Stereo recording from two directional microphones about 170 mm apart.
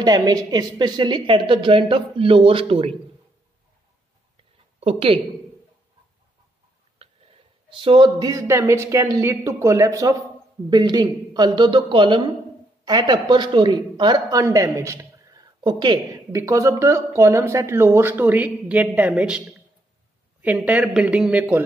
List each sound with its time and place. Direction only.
0.0 s speech: 20° right (ahead or behind)
4.7 s a woman's voice: 35° right (ahead or behind)
7.0 s speech: 30° right (ahead or behind); by 21.6 s 10° right (ahead or behind)